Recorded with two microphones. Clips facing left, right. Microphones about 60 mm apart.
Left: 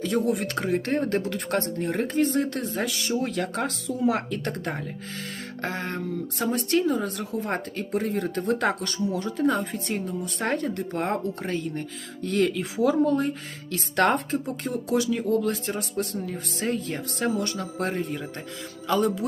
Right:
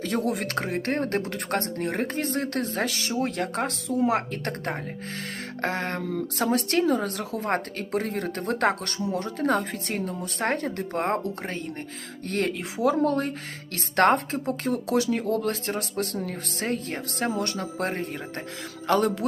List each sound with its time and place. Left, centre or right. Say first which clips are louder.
0.0 s speech: left 2 dB; right
3.1 s speech: even; right
4.3 s speech: left 1 dB; right
7.4 s speech: right 2 dB; right
12.5 s speech: left 1 dB; right
13.1 s speech: left 1 dB; right
18.9 s speech: right 1 dB; right